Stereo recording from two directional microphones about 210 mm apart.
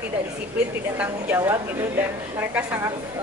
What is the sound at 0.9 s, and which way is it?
Speech, 10° right (ahead or behind).